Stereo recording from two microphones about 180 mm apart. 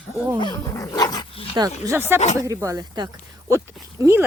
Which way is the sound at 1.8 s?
15° right (ahead or behind).